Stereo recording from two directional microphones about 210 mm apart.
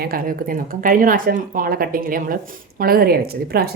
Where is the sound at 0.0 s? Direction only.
45° right (ahead or behind).